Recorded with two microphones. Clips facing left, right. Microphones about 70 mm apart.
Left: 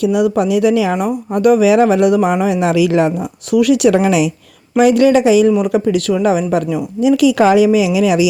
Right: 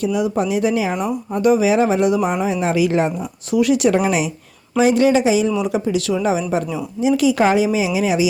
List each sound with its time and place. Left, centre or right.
0.0 s speech: left
3.5 s speech: left
4.8 s speech: left